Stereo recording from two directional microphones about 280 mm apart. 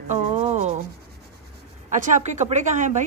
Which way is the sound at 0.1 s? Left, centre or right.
Right.